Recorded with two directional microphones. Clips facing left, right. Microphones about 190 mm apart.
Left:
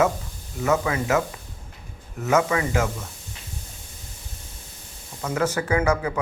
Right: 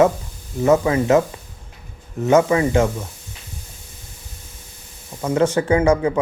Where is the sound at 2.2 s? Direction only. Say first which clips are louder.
Right 6 dB; 30° right (ahead or behind).